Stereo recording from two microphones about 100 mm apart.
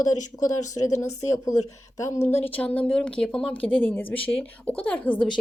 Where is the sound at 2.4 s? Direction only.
15° left (ahead or behind).